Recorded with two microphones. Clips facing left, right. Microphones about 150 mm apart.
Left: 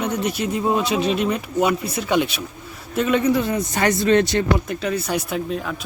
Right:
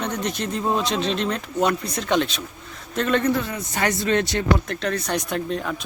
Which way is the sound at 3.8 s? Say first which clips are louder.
Left 4 dB; 25° left (ahead or behind).